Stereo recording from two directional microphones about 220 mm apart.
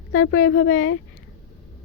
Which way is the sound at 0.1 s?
60° left (ahead or behind).